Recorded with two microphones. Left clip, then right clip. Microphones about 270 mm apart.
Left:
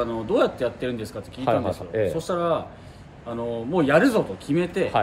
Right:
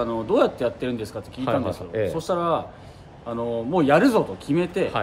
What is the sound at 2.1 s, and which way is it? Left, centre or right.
Speech, centre.